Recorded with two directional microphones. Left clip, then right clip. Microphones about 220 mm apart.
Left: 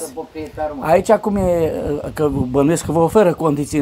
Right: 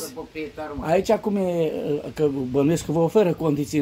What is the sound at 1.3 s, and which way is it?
Speech, 10° left (ahead or behind).